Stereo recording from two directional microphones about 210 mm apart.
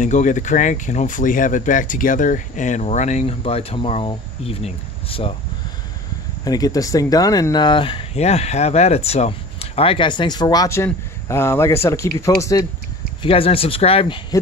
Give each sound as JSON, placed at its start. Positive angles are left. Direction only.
{"t": 0.0, "sound": "speech", "side_deg": 35}
{"t": 6.4, "sound": "speech", "side_deg": 15}
{"t": 13.2, "sound": "speech", "side_deg": 25}